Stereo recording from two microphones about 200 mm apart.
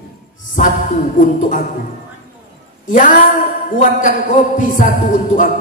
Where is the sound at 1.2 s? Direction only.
40° left (ahead or behind).